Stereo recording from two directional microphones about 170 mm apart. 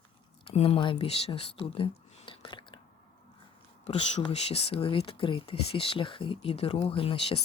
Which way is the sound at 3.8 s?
40° left (ahead or behind).